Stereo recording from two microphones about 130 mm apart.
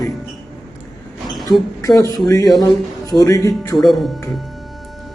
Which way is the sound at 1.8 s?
25° left (ahead or behind).